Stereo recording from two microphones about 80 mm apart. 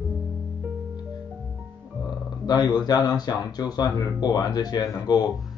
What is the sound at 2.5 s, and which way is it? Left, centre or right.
Speech, left.